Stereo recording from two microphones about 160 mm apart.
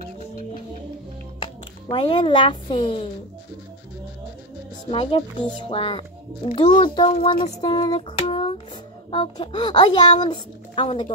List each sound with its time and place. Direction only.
1.9 s a child's voice: 30° left (ahead or behind)
4.9 s a child's voice: 30° left (ahead or behind)
8.2 s a sound: 35° left (ahead or behind)
9.1 s speech: 30° left (ahead or behind)